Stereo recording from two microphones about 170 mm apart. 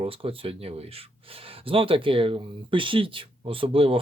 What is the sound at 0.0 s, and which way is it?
Speech, 35° right (ahead or behind).